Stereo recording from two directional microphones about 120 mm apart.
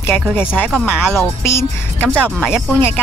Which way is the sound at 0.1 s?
15° left (ahead or behind).